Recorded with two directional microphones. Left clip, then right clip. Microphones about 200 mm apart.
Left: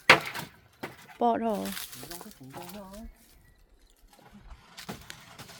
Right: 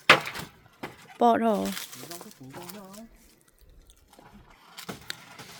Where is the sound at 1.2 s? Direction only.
25° right (ahead or behind).